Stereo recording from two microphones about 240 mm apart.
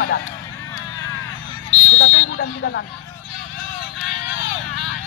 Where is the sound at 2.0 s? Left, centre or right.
Left.